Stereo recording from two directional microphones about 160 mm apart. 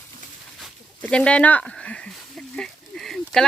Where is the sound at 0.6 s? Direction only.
5° left (ahead or behind).